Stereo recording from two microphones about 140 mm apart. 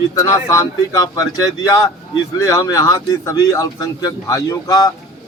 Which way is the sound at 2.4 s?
25° left (ahead or behind).